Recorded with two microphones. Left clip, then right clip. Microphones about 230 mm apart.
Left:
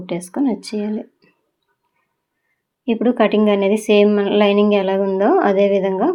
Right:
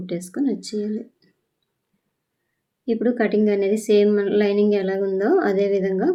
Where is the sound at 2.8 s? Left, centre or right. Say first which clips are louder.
Left 5 dB; centre.